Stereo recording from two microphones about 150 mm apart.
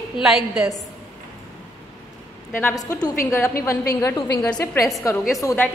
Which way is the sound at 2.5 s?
15° left (ahead or behind).